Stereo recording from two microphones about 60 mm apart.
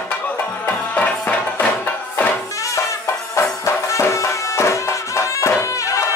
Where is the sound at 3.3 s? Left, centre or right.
Left.